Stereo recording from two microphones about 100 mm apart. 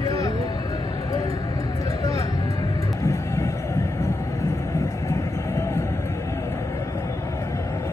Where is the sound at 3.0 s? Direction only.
30° left (ahead or behind).